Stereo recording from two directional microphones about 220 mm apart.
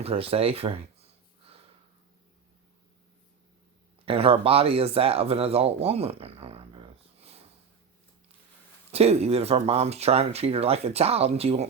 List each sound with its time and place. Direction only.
0.0 s a sound: 25° right (ahead or behind)
4.0 s speech: 25° right (ahead or behind)
8.9 s speech: 30° right (ahead or behind)